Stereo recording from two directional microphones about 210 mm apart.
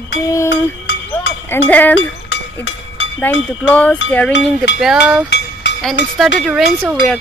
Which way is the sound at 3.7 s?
5° left (ahead or behind).